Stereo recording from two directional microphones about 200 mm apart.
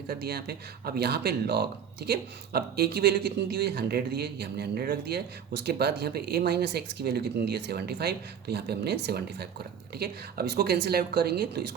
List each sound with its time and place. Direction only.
0.1 s speech: 50° right (ahead or behind)